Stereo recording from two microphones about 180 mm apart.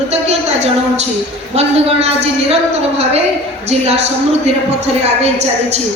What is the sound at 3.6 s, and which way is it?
Speech, 35° right (ahead or behind).